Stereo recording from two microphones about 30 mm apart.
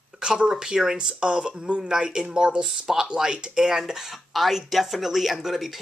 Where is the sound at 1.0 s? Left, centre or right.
Right.